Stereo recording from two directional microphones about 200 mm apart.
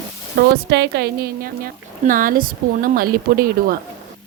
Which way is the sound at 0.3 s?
55° right (ahead or behind).